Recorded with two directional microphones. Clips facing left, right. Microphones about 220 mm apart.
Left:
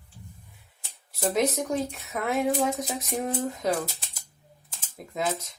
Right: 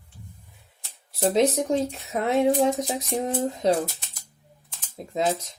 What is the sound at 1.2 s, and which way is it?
Speech, 30° right (ahead or behind).